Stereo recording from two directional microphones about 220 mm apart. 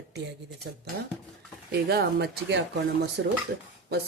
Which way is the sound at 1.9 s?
45° right (ahead or behind).